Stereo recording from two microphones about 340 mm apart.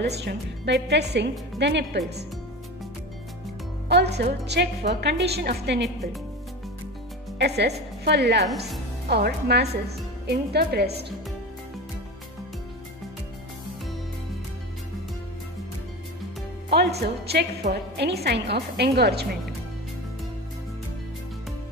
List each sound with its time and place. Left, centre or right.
0.0 s a woman's voice: right
3.9 s a woman's voice: right
7.3 s a woman's voice: right
16.7 s a woman's voice: right